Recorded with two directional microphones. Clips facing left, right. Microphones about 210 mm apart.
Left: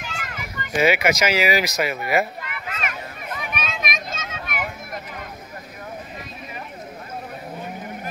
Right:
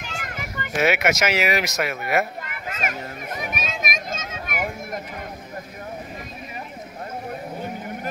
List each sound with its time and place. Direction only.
0.1 s children playing: 45° right (ahead or behind)
0.7 s speech: centre (ahead or behind)
2.4 s children playing: 45° right (ahead or behind)